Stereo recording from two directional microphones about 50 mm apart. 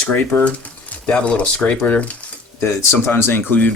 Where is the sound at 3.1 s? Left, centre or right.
Left.